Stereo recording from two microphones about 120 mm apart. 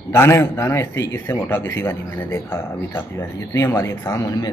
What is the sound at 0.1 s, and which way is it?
Speech, 20° left (ahead or behind).